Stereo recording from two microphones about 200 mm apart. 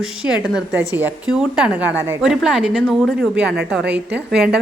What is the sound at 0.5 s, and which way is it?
A woman's voice, 10° right (ahead or behind).